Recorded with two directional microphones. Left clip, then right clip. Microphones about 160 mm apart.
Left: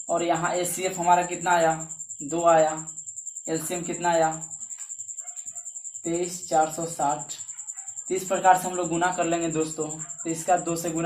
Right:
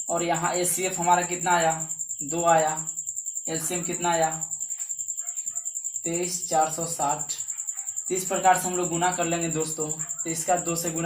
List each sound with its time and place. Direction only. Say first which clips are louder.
0.1 s a man's voice: left 1 dB; 20° left (ahead or behind)
6.0 s a man's voice: left 2 dB; 10° left (ahead or behind)